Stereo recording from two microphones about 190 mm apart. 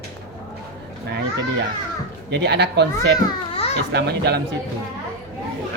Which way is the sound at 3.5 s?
30° left (ahead or behind).